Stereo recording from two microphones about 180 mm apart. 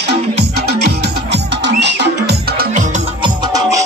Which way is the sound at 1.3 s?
75° right (ahead or behind).